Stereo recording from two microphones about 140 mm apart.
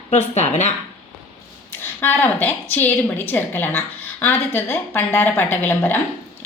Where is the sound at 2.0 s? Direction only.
15° left (ahead or behind).